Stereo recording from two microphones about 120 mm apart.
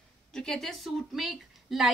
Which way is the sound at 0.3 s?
5° left (ahead or behind).